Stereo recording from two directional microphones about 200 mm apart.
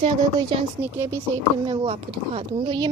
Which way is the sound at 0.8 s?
10° right (ahead or behind).